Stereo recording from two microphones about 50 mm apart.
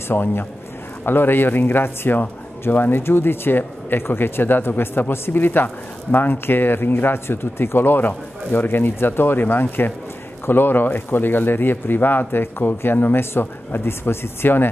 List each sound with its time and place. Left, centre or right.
0.1 s a man's voice: left